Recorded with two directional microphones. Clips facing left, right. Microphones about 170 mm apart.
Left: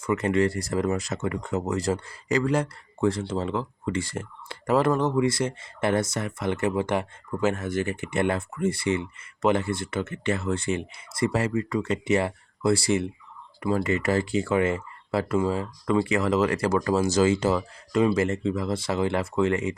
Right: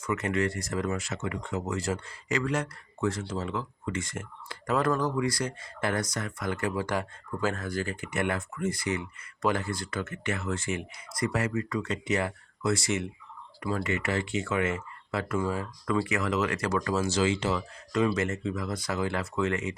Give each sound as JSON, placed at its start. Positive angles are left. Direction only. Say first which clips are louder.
{"t": 0.0, "sound": "speech", "louder": "left 5 dB", "side_deg": 30}
{"t": 18.0, "sound": "speech", "louder": "left 5 dB", "side_deg": 30}